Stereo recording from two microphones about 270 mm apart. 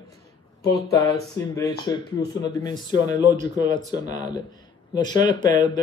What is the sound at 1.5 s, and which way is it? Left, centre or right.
Speech, centre.